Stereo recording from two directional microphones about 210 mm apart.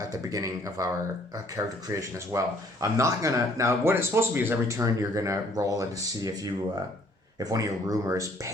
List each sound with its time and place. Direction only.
0.1 s speech: 15° right (ahead or behind)